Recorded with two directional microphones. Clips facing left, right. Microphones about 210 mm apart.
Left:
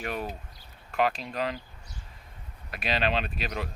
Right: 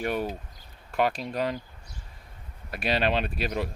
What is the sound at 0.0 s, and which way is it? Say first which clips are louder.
Speech: right 5 dB; 35° right (ahead or behind).